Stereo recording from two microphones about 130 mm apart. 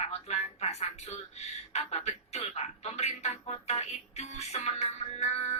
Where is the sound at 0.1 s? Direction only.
55° left (ahead or behind).